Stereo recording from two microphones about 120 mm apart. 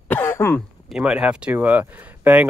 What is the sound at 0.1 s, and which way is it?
Cough, 20° left (ahead or behind).